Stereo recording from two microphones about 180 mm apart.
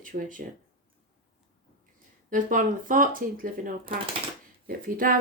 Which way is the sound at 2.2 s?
50° right (ahead or behind).